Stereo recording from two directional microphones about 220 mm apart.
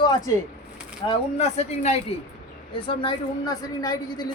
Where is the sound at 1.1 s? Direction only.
30° left (ahead or behind).